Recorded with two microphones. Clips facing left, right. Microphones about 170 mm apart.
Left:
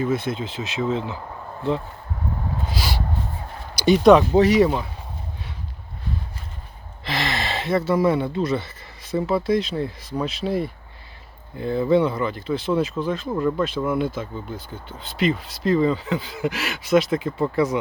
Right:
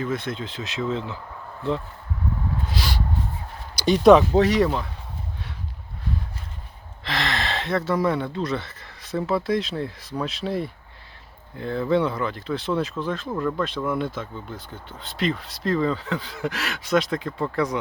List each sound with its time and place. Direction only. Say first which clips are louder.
0.0 s speech: left 4 dB; 5° left (ahead or behind)
2.6 s speech: left 1 dB; 5° left (ahead or behind)
7.0 s speech: left 1 dB; 5° left (ahead or behind)